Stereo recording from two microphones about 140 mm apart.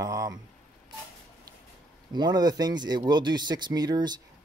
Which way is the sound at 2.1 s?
30° right (ahead or behind).